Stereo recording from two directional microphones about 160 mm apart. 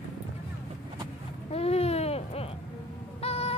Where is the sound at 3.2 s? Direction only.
40° left (ahead or behind).